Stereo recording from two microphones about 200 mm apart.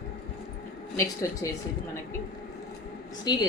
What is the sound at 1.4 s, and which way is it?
Speech, 15° left (ahead or behind).